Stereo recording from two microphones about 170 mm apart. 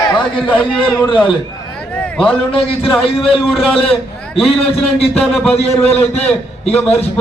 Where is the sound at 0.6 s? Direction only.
5° right (ahead or behind).